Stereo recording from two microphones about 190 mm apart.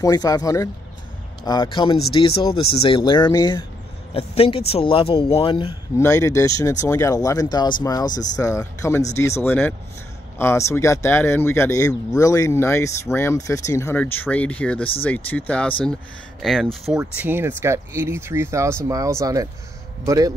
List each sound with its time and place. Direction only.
0.0 s speech: 20° left (ahead or behind)
4.1 s speech: 30° left (ahead or behind)
5.9 s speech: 15° left (ahead or behind)
17.0 s speech: 10° right (ahead or behind)